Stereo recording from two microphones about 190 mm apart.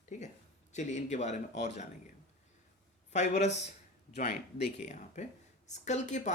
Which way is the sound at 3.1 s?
40° left (ahead or behind).